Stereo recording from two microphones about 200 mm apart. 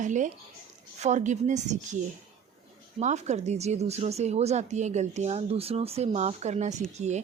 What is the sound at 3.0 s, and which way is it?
Speech, 35° right (ahead or behind).